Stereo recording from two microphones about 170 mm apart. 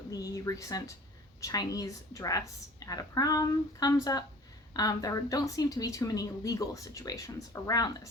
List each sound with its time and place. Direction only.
0.1 s speech: 20° left (ahead or behind)